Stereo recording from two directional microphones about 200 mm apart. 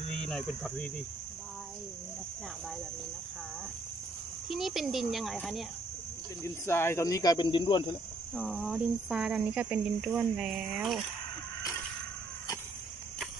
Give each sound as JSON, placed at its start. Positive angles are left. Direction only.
{"t": 0.2, "sound": "speech", "side_deg": 5}
{"t": 4.5, "sound": "speech", "side_deg": 0}
{"t": 6.4, "sound": "speech", "side_deg": 15}
{"t": 8.4, "sound": "speech", "side_deg": 0}